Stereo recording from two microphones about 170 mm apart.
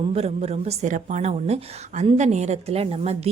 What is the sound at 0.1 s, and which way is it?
A woman's voice, 35° right (ahead or behind).